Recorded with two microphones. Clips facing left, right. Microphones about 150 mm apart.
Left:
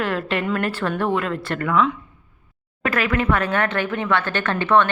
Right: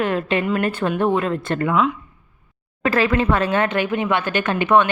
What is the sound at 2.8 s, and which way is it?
Speech, 30° right (ahead or behind).